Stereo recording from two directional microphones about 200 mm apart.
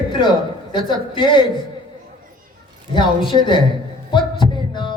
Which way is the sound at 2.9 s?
25° left (ahead or behind).